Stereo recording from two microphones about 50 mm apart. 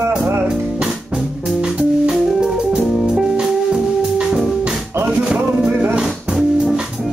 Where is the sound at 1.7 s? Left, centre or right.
Centre.